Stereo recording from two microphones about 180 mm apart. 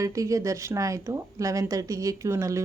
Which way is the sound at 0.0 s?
20° right (ahead or behind).